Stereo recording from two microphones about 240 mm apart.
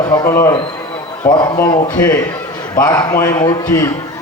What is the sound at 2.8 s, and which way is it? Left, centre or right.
A man's voice, centre.